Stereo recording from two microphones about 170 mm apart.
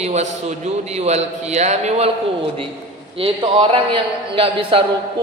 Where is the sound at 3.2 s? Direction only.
30° right (ahead or behind).